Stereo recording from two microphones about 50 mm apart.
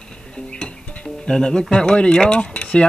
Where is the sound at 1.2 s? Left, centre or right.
Centre.